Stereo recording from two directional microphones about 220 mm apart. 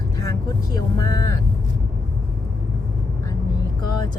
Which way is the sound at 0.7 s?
15° left (ahead or behind).